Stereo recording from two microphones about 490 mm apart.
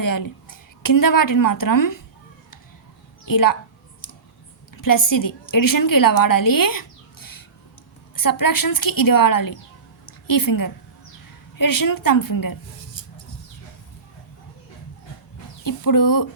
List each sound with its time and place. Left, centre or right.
0.0 s a woman's voice: left
3.2 s a woman's voice: left
4.7 s a woman's voice: left
10.1 s a sound: left
11.5 s a woman's voice: left
15.6 s a woman's voice: left